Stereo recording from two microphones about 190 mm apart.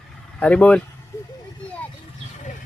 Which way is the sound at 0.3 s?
5° left (ahead or behind).